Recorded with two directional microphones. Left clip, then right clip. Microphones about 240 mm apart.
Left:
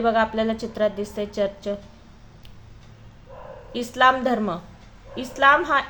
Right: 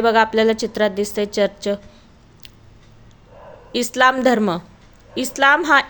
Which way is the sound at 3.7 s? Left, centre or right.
Right.